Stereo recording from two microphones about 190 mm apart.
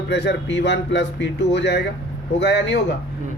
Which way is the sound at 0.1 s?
65° left (ahead or behind).